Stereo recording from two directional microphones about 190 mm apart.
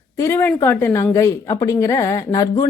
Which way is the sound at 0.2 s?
10° left (ahead or behind).